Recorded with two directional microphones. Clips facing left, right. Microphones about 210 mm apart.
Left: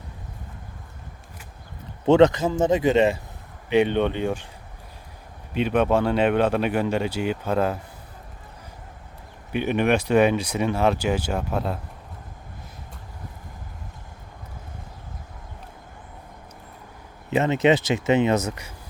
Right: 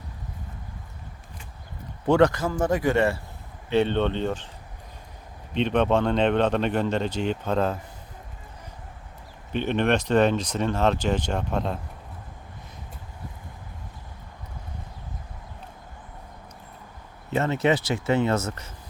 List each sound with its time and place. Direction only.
2.0 s speech: 20° left (ahead or behind)
5.5 s speech: 5° left (ahead or behind)
9.5 s speech: 10° left (ahead or behind)
17.3 s speech: 20° left (ahead or behind)